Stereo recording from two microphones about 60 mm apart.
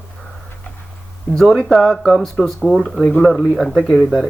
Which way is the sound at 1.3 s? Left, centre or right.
Left.